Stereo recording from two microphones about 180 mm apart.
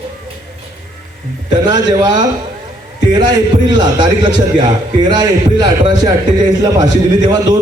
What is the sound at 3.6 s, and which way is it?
A man's voice, 25° right (ahead or behind).